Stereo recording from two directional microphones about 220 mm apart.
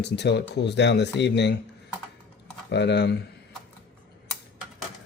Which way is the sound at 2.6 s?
50° left (ahead or behind).